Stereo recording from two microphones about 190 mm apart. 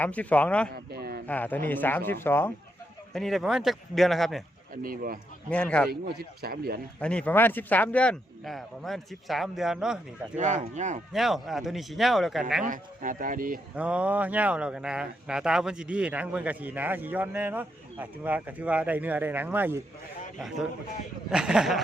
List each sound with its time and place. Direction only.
0.0 s speech: 5° left (ahead or behind)
0.7 s speech: 55° right (ahead or behind)
1.3 s speech: 10° left (ahead or behind)
3.1 s speech: centre (ahead or behind)
4.7 s speech: 50° right (ahead or behind)
5.5 s speech: 5° left (ahead or behind)
5.9 s speech: 55° right (ahead or behind)
7.0 s speech: 5° left (ahead or behind)
10.3 s speech: 40° right (ahead or behind)
11.1 s speech: centre (ahead or behind)
12.6 s speech: 45° right (ahead or behind)
13.7 s speech: 5° right (ahead or behind)
21.2 s speech: 5° right (ahead or behind)